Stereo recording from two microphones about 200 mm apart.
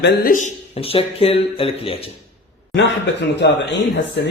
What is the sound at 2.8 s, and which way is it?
A man's voice, 60° left (ahead or behind).